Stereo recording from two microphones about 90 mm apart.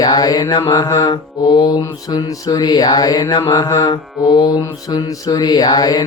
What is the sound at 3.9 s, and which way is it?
Mantra, 55° left (ahead or behind).